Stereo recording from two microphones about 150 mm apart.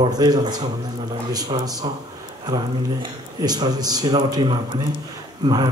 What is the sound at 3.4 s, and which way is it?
Speech, 25° right (ahead or behind).